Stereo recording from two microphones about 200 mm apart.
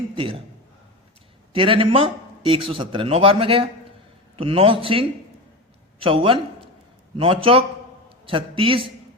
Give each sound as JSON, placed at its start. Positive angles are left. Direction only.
{"t": 1.5, "sound": "speech", "side_deg": -25}